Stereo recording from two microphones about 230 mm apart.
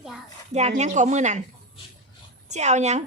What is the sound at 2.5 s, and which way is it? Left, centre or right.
Speech, right.